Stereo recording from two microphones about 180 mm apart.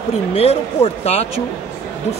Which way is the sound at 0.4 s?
35° left (ahead or behind).